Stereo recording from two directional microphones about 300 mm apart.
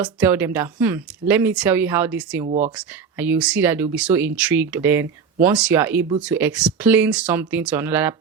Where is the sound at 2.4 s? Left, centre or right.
Right.